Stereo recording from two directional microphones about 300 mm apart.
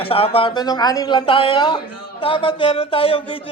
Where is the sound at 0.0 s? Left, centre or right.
Centre.